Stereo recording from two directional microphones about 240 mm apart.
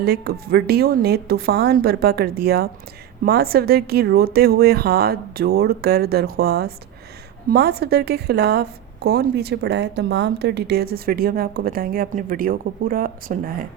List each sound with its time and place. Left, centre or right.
0.0 s a woman's voice: right